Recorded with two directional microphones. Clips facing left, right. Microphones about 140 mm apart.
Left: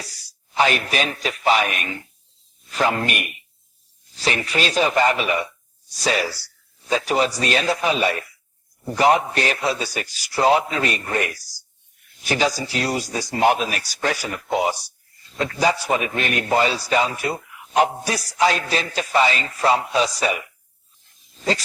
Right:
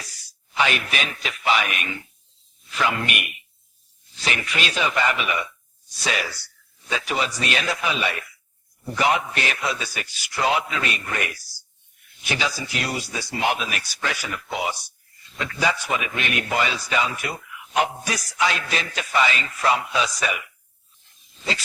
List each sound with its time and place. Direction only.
0.5 s a man's voice: 40° left (ahead or behind)